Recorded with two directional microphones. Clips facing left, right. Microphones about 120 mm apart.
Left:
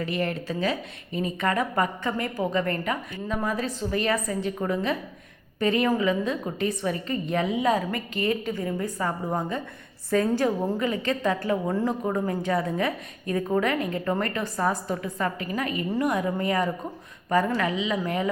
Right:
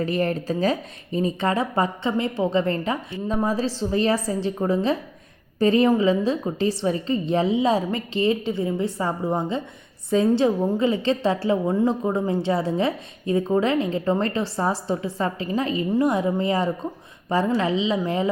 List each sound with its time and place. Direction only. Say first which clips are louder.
0.0 s a woman's voice: right 5 dB; 35° right (ahead or behind)